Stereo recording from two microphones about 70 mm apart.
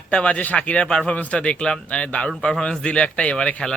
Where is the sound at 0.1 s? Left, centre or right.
Centre.